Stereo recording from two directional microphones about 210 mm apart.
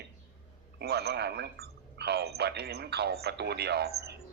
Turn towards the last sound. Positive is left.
turn(degrees=-50)  # may be behind; listen again after turning